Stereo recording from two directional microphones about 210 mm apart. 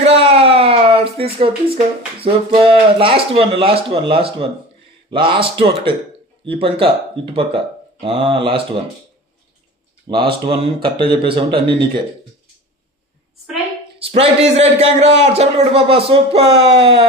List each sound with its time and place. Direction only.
0.0 s a sound: 25° right (ahead or behind)
1.2 s a man's voice: 25° right (ahead or behind)
8.0 s a man's voice: 25° right (ahead or behind)
10.1 s a man's voice: 25° right (ahead or behind)
14.0 s a man's voice: 30° right (ahead or behind)